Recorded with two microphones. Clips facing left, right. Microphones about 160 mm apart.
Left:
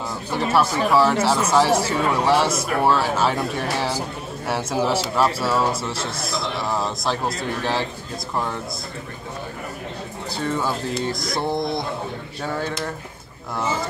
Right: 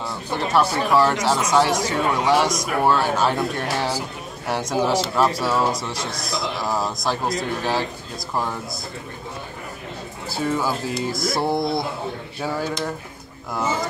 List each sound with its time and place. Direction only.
0.6 s speech: centre (ahead or behind)
10.3 s speech: 5° right (ahead or behind)
11.5 s speech: 20° left (ahead or behind)
12.4 s speech: 5° right (ahead or behind)